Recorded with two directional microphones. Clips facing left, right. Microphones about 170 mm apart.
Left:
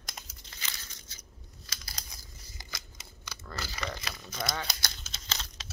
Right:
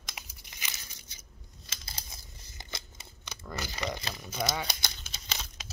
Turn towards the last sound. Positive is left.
turn(degrees=-15)  # may be behind; listen again after turning